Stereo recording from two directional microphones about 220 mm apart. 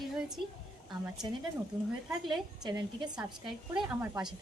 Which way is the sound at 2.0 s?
Centre (ahead or behind).